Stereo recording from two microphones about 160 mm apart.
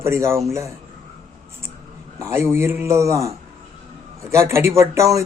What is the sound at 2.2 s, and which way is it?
A man's voice, 15° right (ahead or behind).